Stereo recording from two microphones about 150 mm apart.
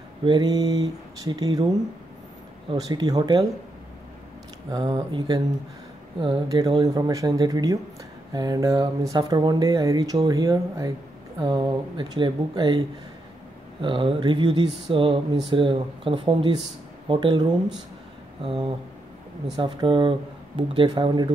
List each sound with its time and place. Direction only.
0.2 s speech: 30° right (ahead or behind)
2.7 s speech: 25° right (ahead or behind)
4.6 s speech: 30° right (ahead or behind)
6.5 s speech: 25° right (ahead or behind)